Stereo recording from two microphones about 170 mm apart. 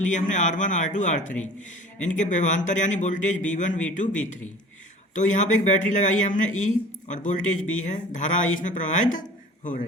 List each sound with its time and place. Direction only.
0.0 s speech: 45° left (ahead or behind)